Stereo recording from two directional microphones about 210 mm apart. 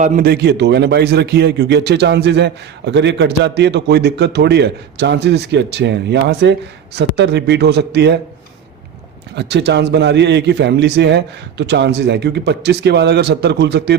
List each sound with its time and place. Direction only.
0.0 s a man's voice: 40° right (ahead or behind)
9.3 s a man's voice: 55° right (ahead or behind)